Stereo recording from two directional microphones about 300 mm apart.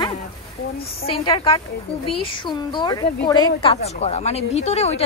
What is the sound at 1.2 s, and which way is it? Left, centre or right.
A woman's voice, centre.